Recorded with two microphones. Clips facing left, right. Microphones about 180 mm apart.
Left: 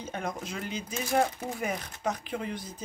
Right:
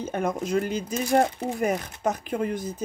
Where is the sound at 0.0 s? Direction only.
50° right (ahead or behind).